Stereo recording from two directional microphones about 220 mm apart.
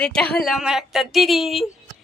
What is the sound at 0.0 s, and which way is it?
A woman's voice, 5° left (ahead or behind).